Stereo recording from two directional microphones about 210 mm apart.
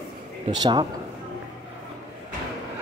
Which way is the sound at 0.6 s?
20° right (ahead or behind).